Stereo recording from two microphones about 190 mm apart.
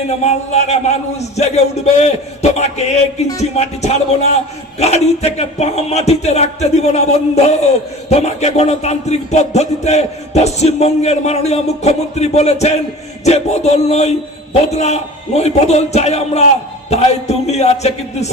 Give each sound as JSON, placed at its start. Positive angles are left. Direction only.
{"t": 0.1, "sound": "music", "side_deg": 35}